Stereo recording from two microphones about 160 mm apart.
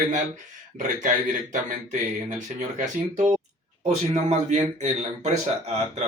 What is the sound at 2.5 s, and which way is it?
Speech, 50° right (ahead or behind).